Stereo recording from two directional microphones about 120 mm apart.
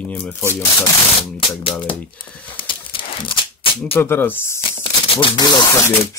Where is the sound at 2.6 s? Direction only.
45° left (ahead or behind).